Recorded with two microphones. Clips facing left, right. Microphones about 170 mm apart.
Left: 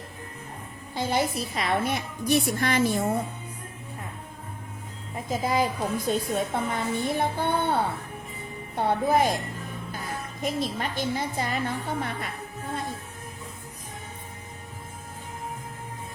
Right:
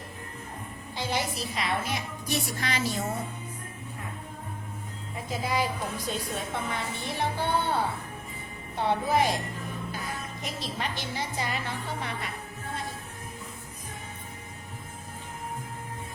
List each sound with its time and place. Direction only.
0.9 s a woman's voice: 55° left (ahead or behind)
5.3 s a woman's voice: 45° left (ahead or behind)
10.4 s a woman's voice: 50° left (ahead or behind)